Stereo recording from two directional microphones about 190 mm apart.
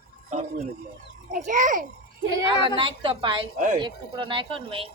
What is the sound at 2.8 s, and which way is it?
A woman's voice, 25° right (ahead or behind).